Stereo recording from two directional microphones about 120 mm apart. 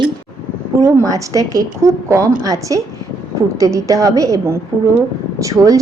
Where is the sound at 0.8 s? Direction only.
25° right (ahead or behind).